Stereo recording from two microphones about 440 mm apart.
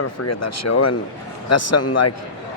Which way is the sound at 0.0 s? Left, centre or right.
Left.